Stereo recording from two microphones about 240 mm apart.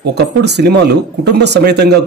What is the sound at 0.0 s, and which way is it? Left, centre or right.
Speech, right.